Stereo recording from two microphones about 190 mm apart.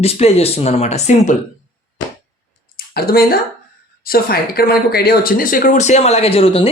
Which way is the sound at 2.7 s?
55° left (ahead or behind).